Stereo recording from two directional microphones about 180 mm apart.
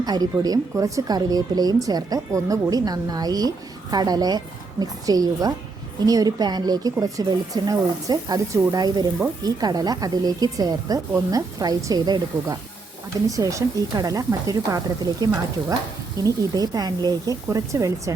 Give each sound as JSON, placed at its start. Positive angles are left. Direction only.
{"t": 0.0, "sound": "speech", "side_deg": -20}
{"t": 16.2, "sound": "speech", "side_deg": -20}